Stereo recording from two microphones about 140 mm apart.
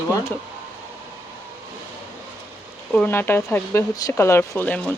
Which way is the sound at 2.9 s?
10° left (ahead or behind).